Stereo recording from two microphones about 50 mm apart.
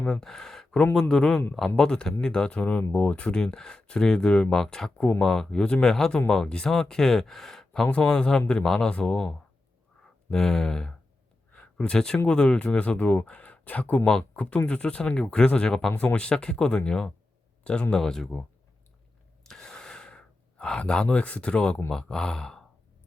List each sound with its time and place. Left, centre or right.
0.1 s speech: centre
10.3 s speech: centre
11.5 s a sound: centre
12.3 s speech: centre
14.0 s speech: centre
17.9 s speech: centre
19.5 s gasp: centre
21.8 s speech: centre